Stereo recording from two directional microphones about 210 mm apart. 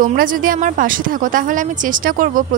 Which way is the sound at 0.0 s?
40° right (ahead or behind).